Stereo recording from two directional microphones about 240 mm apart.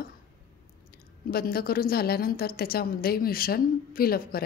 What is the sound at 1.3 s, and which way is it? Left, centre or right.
A woman's voice, left.